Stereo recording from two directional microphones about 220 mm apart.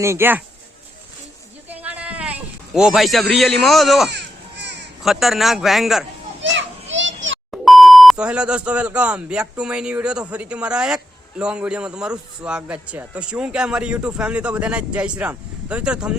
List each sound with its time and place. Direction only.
0.0 s speech: 10° right (ahead or behind)
1.6 s a sound: 5° right (ahead or behind)
4.1 s a sound: 50° right (ahead or behind)
5.0 s speech: centre (ahead or behind)
6.4 s children playing: 55° right (ahead or behind)
7.5 s speech: centre (ahead or behind)